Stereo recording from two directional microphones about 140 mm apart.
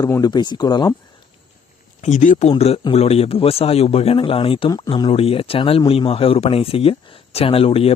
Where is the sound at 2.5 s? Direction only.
45° left (ahead or behind).